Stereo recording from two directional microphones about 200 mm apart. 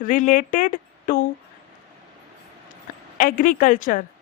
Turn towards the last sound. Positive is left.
turn(degrees=40)  # may be behind; listen again after turning